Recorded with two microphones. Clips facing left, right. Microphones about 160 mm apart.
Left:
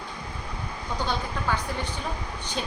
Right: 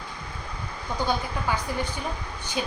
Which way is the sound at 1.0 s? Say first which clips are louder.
Right 2 dB; 10° right (ahead or behind).